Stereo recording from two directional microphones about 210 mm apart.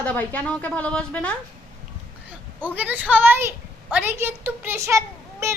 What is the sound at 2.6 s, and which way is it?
A woman's voice, 10° right (ahead or behind).